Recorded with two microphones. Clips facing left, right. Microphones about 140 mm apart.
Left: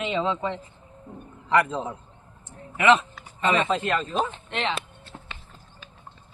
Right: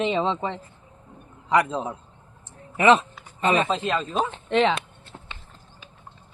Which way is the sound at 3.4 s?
30° right (ahead or behind).